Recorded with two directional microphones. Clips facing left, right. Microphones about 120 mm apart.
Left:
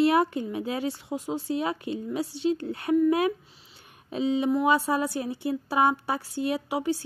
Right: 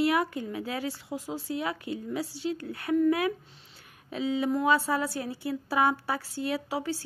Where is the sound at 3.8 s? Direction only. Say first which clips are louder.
Left 4 dB; 20° left (ahead or behind).